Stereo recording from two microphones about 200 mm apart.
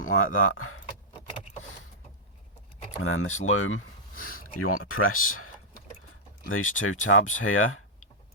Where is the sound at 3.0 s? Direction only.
90° left.